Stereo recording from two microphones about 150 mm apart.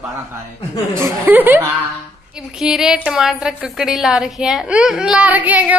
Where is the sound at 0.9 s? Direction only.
20° right (ahead or behind).